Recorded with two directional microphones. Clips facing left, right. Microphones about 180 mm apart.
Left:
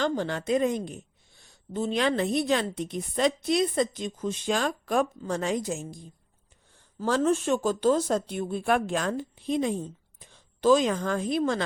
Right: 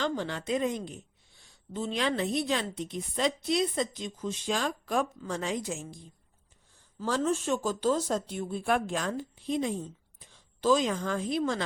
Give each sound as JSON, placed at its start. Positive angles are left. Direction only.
{"t": 0.0, "sound": "a woman's voice", "side_deg": 50}
{"t": 7.0, "sound": "a woman's voice", "side_deg": 60}